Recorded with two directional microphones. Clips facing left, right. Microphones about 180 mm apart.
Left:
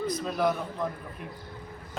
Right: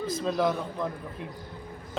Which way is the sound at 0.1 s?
30° right (ahead or behind).